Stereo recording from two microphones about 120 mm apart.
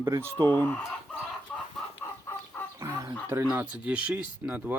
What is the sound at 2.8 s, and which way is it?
Chicken, 25° right (ahead or behind).